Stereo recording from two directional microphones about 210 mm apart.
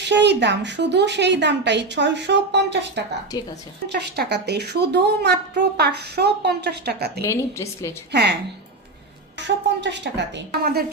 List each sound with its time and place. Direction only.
0.1 s speech: 55° right (ahead or behind)
3.3 s a woman's voice: 20° left (ahead or behind)
3.8 s a woman's voice: 55° right (ahead or behind)
7.3 s a woman's voice: 15° left (ahead or behind)
8.1 s a woman's voice: 55° right (ahead or behind)
9.6 s speech: 55° right (ahead or behind)